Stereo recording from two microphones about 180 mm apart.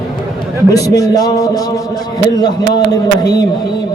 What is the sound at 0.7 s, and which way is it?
A man's voice, 20° left (ahead or behind).